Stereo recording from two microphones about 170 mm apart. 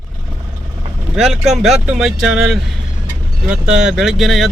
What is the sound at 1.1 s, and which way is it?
Speech, centre (ahead or behind).